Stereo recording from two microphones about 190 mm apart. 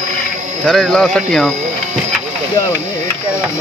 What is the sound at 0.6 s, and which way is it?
Speech, 5° left (ahead or behind).